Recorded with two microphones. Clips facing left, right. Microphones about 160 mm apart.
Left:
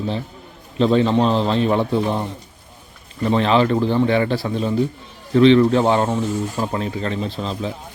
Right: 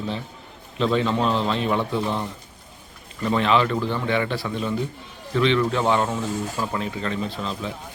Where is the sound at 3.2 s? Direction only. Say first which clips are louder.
Left 4 dB; 35° left (ahead or behind).